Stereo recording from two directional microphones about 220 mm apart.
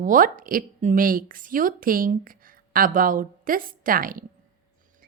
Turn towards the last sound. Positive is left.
turn(degrees=-40)  # may be behind; listen again after turning